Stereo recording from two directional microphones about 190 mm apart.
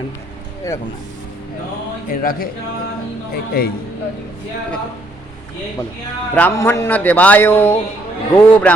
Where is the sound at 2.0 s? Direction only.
50° left (ahead or behind).